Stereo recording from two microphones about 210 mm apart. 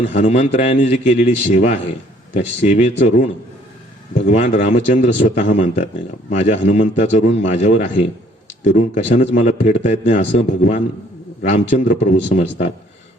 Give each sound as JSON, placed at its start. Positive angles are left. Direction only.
{"t": 0.0, "sound": "a man's voice", "side_deg": 30}
{"t": 4.3, "sound": "a man's voice", "side_deg": 35}